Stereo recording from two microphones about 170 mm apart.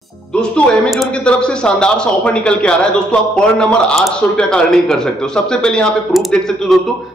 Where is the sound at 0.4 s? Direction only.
5° left (ahead or behind).